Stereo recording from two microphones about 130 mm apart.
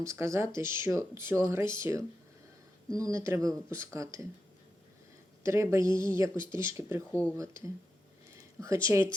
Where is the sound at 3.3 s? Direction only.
25° right (ahead or behind).